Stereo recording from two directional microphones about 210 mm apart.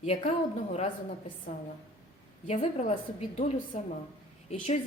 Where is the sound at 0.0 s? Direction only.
30° left (ahead or behind).